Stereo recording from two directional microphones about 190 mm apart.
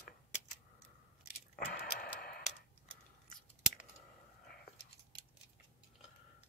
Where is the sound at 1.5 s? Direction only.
55° left (ahead or behind).